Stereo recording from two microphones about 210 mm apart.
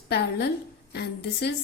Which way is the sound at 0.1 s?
50° left (ahead or behind).